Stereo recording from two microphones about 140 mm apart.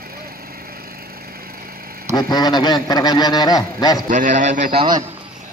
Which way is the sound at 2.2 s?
30° left (ahead or behind).